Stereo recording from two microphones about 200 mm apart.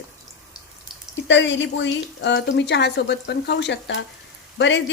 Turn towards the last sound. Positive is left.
turn(degrees=65)  # may be behind; listen again after turning